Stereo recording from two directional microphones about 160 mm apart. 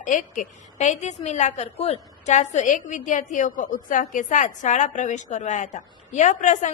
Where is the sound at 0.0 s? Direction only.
50° left (ahead or behind).